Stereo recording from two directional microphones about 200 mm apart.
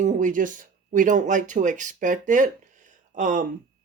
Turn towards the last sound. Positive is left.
turn(degrees=-40)  # may be behind; listen again after turning